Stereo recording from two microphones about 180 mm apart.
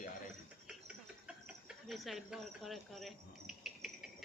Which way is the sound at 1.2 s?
5° right (ahead or behind).